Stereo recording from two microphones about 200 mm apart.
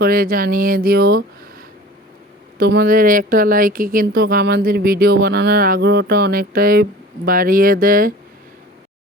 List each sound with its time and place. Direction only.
0.0 s speech: 45° right (ahead or behind)
2.6 s speech: 50° right (ahead or behind)